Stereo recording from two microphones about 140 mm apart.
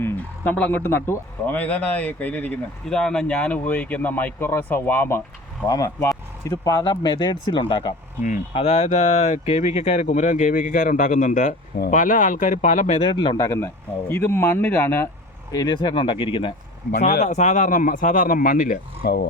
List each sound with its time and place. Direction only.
0.0 s speech: 10° left (ahead or behind); by 7.9 s 35° left (ahead or behind)
8.5 s speech: 45° left (ahead or behind)
13.1 s speech: 30° left (ahead or behind)
15.5 s speech: 30° left (ahead or behind)
17.0 s speech: 55° left (ahead or behind); by 19.3 s 85° left